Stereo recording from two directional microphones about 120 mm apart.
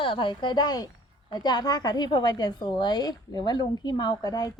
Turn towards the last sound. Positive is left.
turn(degrees=30)  # may be behind; listen again after turning